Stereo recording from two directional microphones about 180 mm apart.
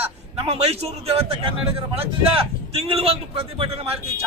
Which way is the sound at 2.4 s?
35° right (ahead or behind).